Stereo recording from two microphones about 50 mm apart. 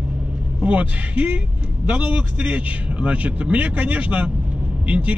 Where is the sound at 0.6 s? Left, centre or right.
Right.